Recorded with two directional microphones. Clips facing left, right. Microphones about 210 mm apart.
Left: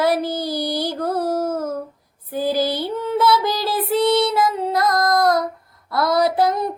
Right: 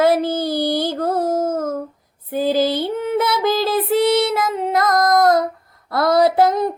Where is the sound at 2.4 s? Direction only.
20° right (ahead or behind).